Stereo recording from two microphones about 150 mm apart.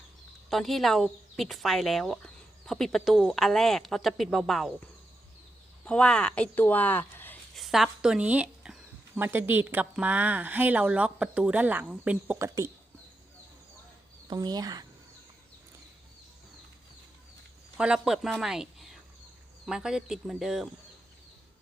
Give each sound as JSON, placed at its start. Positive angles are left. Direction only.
{"t": 0.5, "sound": "speech", "side_deg": 0}
{"t": 5.8, "sound": "speech", "side_deg": 5}
{"t": 7.5, "sound": "speech", "side_deg": 0}
{"t": 14.3, "sound": "speech", "side_deg": -25}
{"t": 17.7, "sound": "speech", "side_deg": -5}